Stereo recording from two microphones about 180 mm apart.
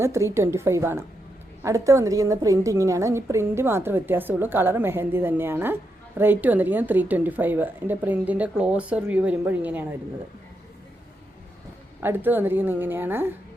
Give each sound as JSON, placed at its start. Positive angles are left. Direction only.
{"t": 0.0, "sound": "a woman's voice", "side_deg": -15}
{"t": 11.9, "sound": "a woman's voice", "side_deg": -10}